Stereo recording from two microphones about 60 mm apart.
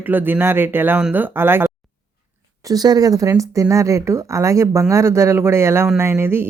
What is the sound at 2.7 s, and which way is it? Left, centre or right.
Speech, right.